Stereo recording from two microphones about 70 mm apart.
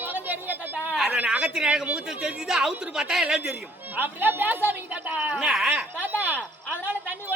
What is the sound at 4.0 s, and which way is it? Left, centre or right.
A woman's voice, right.